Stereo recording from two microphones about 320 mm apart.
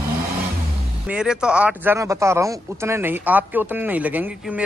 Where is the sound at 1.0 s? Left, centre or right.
Centre.